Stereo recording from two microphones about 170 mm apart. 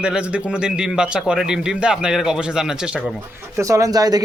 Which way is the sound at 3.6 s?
20° right (ahead or behind).